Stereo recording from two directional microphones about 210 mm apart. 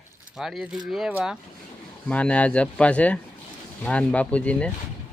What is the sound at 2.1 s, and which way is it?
Speech, 5° left (ahead or behind).